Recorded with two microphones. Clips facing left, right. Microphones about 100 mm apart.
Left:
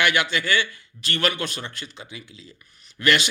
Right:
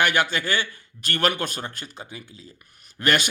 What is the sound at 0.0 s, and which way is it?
Speech, 45° right (ahead or behind).